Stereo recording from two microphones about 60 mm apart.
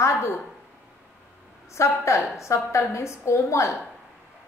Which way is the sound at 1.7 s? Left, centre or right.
Left.